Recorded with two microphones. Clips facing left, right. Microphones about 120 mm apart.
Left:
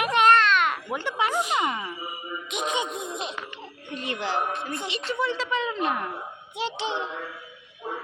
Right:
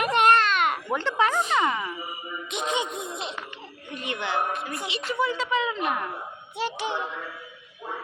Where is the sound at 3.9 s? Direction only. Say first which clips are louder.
Even; 35° left (ahead or behind).